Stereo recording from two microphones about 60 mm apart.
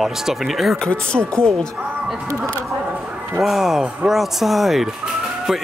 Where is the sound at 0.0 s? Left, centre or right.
Centre.